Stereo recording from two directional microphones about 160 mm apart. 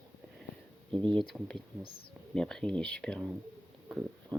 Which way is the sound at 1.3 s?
5° left (ahead or behind).